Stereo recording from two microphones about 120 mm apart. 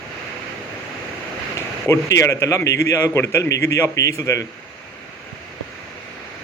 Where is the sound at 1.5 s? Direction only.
25° left (ahead or behind).